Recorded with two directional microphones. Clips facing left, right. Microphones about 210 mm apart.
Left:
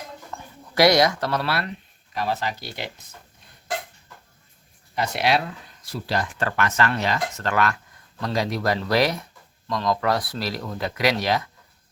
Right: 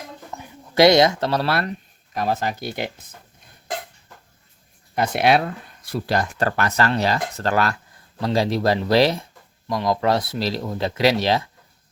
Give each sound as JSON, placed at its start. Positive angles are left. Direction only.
{"t": 0.3, "sound": "speech", "side_deg": -20}
{"t": 4.9, "sound": "speech", "side_deg": -55}